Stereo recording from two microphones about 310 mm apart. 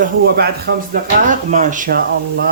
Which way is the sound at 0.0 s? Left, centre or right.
Right.